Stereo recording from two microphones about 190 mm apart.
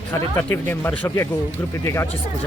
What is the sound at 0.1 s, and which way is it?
Speech, 10° left (ahead or behind).